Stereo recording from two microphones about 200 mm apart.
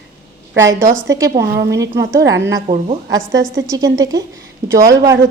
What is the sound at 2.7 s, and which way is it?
A woman's voice, 25° right (ahead or behind).